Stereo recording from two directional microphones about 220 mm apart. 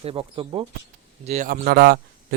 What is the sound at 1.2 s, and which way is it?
Speech, 35° right (ahead or behind).